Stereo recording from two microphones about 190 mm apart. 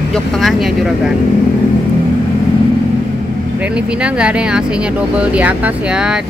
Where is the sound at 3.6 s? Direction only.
5° right (ahead or behind).